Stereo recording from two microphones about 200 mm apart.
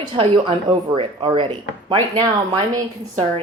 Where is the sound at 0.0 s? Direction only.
25° right (ahead or behind).